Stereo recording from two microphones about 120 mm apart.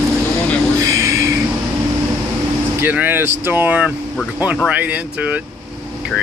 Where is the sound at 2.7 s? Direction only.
15° right (ahead or behind).